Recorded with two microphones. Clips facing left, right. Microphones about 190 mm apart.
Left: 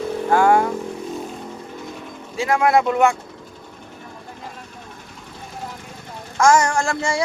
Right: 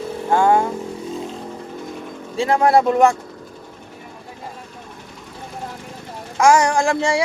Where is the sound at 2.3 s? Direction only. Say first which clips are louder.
Right 2 dB; 30° right (ahead or behind).